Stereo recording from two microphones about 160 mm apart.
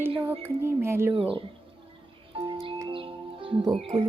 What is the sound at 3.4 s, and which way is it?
Speech, 35° right (ahead or behind).